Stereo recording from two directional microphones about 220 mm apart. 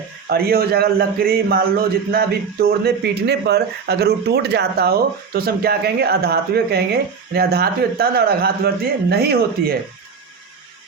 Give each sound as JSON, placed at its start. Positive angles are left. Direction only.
{"t": 0.3, "sound": "speech", "side_deg": -45}